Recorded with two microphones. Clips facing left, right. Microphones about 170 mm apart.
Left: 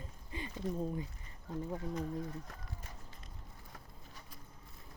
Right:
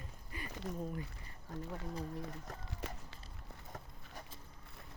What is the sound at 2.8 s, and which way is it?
Run, 80° right.